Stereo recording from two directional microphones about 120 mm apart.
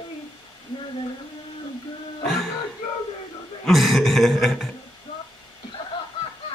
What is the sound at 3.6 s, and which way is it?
Throat clearing, centre (ahead or behind).